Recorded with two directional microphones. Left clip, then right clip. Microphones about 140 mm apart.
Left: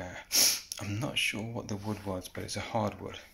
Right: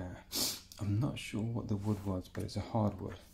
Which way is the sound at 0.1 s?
15° right (ahead or behind).